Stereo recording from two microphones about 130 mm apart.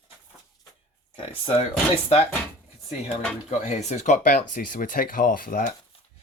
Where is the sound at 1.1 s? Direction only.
45° left (ahead or behind).